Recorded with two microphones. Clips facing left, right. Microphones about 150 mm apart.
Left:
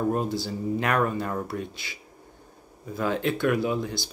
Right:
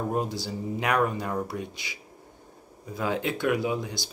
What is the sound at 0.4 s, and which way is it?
Speech, 15° right (ahead or behind).